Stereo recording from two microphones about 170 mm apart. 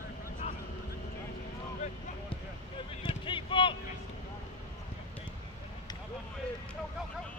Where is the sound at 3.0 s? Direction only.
30° left (ahead or behind).